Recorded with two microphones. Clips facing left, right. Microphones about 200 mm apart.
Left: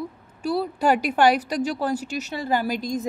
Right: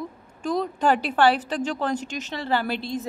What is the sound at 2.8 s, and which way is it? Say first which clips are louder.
Speech: left 3 dB; 40° left (ahead or behind).